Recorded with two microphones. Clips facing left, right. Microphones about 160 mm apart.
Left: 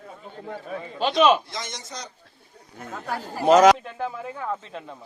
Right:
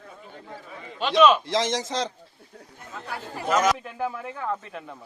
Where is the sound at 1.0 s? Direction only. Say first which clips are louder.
Right 1 dB; 35° left (ahead or behind).